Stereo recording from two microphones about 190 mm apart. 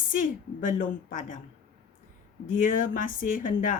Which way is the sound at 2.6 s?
45° left (ahead or behind).